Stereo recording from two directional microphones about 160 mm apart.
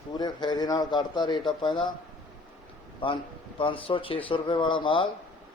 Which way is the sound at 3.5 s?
35° left (ahead or behind).